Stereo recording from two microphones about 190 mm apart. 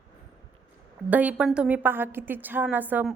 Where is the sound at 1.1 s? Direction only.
5° right (ahead or behind).